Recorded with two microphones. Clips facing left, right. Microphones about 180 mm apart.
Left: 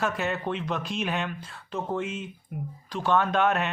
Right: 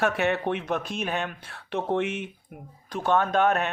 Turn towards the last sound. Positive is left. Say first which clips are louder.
# right 2 dB
turn(degrees=-45)  # may be behind; listen again after turning